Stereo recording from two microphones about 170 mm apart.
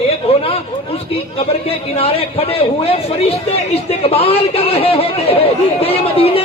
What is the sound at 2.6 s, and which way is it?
A man's voice, 35° left (ahead or behind).